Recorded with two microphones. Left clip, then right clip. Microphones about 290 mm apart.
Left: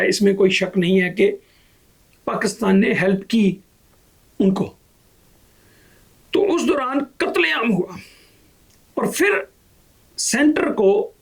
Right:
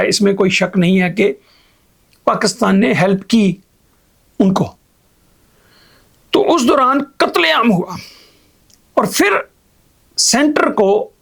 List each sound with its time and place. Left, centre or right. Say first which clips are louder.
0.0 s speech: right 3 dB; right
6.3 s speech: right 6 dB; right